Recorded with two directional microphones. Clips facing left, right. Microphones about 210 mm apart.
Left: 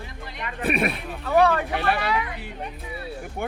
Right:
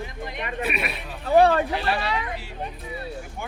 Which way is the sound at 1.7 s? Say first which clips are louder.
Left 1 dB; 55° left (ahead or behind).